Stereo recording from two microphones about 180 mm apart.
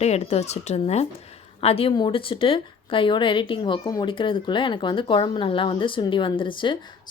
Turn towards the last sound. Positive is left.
turn(degrees=25)  # may be behind; listen again after turning